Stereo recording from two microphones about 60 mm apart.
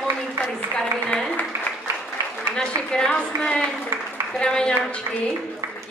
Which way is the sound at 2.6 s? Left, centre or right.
Centre.